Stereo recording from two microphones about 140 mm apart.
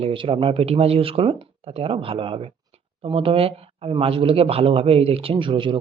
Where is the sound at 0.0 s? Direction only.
40° right (ahead or behind).